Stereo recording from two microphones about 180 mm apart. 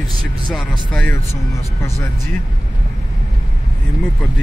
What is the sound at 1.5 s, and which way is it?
Speech, 15° left (ahead or behind).